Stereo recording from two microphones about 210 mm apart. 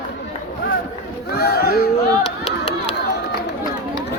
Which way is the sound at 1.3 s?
50° left (ahead or behind).